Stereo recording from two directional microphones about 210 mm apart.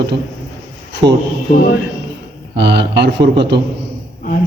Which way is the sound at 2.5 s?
55° right (ahead or behind).